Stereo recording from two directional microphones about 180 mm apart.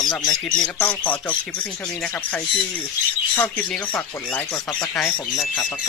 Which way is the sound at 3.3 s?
10° left (ahead or behind).